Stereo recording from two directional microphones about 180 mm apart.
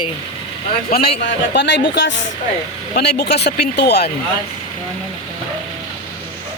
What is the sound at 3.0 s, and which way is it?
Speech, 65° left (ahead or behind).